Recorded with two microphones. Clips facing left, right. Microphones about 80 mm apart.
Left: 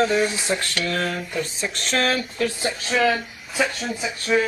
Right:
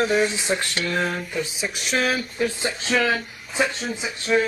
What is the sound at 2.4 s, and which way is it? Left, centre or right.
Speech, right.